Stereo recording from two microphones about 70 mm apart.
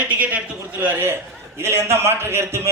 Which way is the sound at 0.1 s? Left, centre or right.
Centre.